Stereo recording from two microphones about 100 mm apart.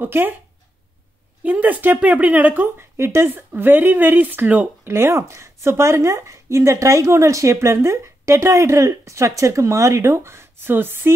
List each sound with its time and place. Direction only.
0.0 s speech: 20° right (ahead or behind)
1.4 s speech: 15° right (ahead or behind)